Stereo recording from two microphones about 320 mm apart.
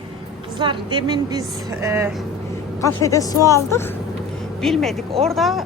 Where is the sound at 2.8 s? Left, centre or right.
Centre.